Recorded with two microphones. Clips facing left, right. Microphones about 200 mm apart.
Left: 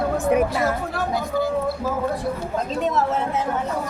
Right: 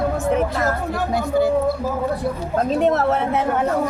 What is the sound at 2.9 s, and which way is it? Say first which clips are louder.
Speech: right 3 dB; 65° right (ahead or behind).